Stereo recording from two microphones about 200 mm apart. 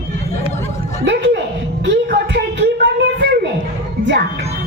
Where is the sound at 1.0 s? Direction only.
60° right (ahead or behind).